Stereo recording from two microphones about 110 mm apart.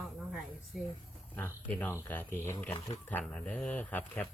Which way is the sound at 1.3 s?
15° left (ahead or behind).